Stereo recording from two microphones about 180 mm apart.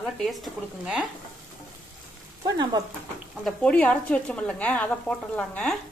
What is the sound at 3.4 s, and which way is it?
Speech, 5° left (ahead or behind).